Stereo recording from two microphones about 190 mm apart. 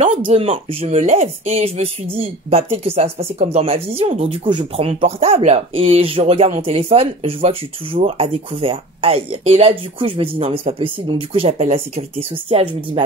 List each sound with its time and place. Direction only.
0.0 s speech: 30° right (ahead or behind)